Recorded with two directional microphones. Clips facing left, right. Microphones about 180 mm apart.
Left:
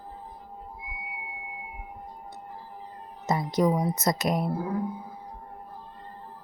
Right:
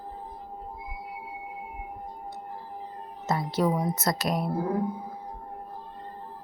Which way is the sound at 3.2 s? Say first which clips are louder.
Left 2 dB; 15° left (ahead or behind).